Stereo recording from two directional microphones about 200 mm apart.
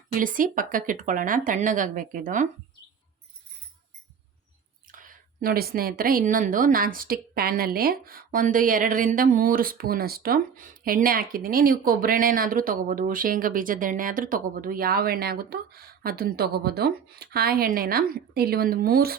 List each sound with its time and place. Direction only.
0.2 s speech: 40° right (ahead or behind)
4.9 s a woman's voice: 40° right (ahead or behind)